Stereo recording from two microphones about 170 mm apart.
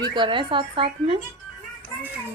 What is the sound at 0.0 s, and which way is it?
Speech, 25° right (ahead or behind).